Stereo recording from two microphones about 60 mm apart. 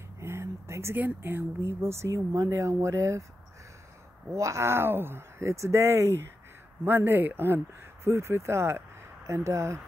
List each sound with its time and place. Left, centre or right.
0.2 s a sound: right
0.9 s speech: right
4.4 s speech: right